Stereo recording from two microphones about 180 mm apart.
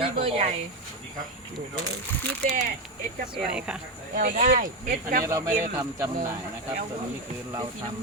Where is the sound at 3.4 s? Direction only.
5° right (ahead or behind).